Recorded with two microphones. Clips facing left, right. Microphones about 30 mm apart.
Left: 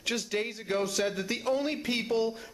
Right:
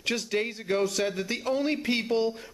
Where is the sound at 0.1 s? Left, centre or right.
Centre.